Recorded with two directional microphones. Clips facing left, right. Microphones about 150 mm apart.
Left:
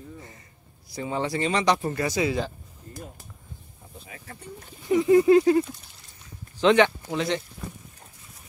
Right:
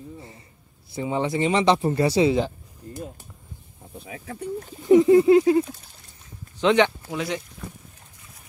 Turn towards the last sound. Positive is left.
turn(degrees=-5)  # may be behind; listen again after turning